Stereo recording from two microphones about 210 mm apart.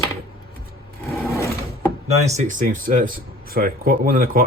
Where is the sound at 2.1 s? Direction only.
30° right (ahead or behind).